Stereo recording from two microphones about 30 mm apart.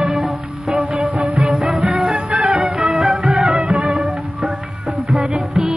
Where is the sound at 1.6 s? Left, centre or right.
Right.